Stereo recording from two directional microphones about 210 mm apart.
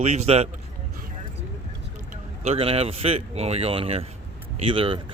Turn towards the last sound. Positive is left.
turn(degrees=-25)  # may be behind; listen again after turning